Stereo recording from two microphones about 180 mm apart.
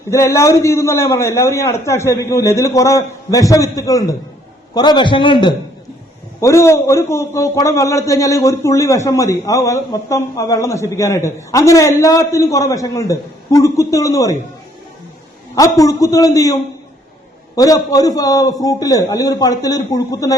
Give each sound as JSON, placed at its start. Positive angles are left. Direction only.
{"t": 0.1, "sound": "a man's voice", "side_deg": 15}
{"t": 6.4, "sound": "a man's voice", "side_deg": 15}
{"t": 15.5, "sound": "a man's voice", "side_deg": 20}